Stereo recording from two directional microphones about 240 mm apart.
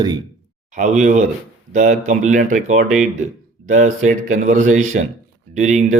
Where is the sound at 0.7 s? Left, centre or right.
Right.